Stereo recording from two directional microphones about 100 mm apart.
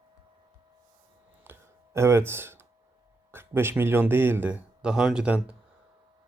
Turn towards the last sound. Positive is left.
turn(degrees=-15)  # may be behind; listen again after turning